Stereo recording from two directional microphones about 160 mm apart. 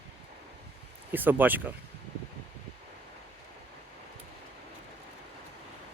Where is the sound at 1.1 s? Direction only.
10° right (ahead or behind).